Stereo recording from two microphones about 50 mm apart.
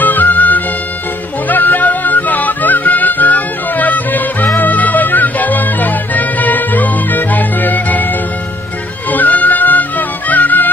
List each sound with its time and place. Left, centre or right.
0.0 s music: left